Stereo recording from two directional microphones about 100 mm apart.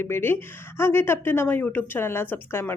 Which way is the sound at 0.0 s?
25° left (ahead or behind).